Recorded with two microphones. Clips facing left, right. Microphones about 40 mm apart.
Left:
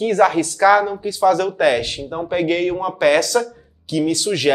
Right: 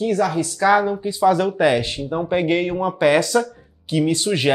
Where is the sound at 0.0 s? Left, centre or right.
Left.